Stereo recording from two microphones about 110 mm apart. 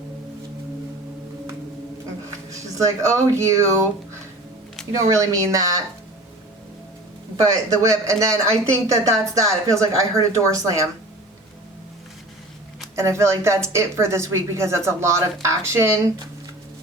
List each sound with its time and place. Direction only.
2.5 s speech: 30° right (ahead or behind)
7.3 s speech: 30° right (ahead or behind)
13.0 s speech: 25° right (ahead or behind)